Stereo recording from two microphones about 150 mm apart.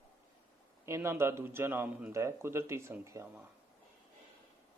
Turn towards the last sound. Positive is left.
turn(degrees=-20)  # may be behind; listen again after turning